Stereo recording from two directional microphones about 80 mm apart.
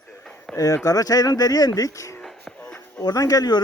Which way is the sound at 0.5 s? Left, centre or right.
Left.